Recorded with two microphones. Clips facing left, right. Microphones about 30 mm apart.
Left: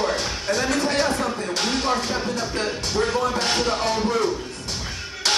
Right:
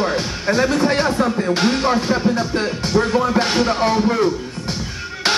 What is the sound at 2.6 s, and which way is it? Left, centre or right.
Music, centre.